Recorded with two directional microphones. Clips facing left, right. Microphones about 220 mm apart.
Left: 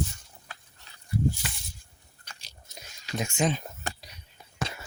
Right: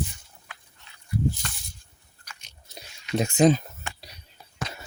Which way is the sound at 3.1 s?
35° right (ahead or behind).